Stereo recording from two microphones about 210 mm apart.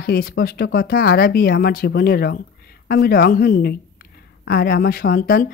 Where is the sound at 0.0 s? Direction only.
45° left (ahead or behind).